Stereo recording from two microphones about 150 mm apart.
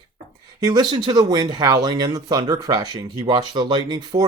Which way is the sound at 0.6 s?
30° right (ahead or behind).